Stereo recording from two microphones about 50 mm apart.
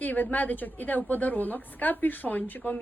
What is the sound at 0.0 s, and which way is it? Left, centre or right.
A woman's voice, left.